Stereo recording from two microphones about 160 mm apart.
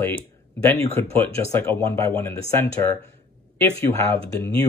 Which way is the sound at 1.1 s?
15° left (ahead or behind).